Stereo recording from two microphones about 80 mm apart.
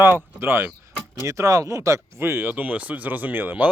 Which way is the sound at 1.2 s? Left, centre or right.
Right.